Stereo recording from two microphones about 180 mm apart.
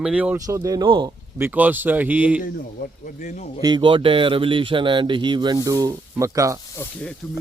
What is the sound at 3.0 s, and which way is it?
Speech, 40° left (ahead or behind).